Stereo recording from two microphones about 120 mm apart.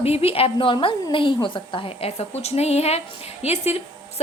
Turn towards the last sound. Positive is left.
turn(degrees=60)  # may be behind; listen again after turning